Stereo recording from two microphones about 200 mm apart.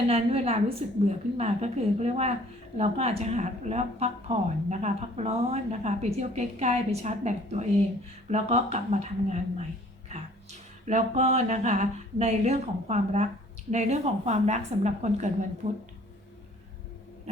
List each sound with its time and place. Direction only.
0.1 s a woman's voice: 30° right (ahead or behind)
10.8 s a woman's voice: 35° right (ahead or behind)